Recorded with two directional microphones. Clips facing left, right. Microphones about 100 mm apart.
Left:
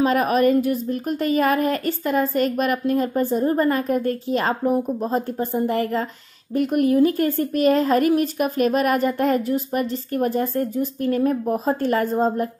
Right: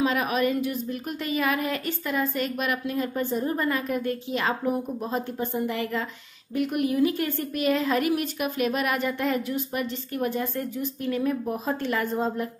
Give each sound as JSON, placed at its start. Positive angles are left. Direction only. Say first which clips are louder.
{"t": 0.0, "sound": "a woman's voice", "louder": "left 6 dB", "side_deg": 45}